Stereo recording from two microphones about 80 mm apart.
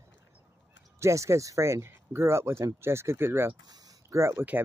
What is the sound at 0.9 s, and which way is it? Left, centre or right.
Speech, right.